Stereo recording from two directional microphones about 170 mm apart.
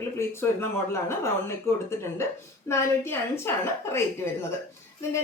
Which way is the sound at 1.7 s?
15° left (ahead or behind).